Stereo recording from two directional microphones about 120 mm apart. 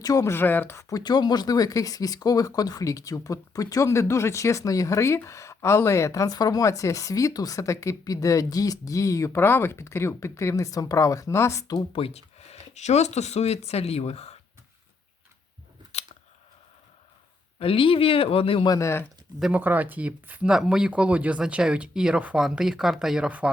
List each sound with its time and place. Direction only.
0.0 s speech: 30° left (ahead or behind)
11.9 s speech: 55° left (ahead or behind)
17.6 s speech: 50° left (ahead or behind)
18.7 s speech: 25° left (ahead or behind)
19.4 s speech: 10° right (ahead or behind)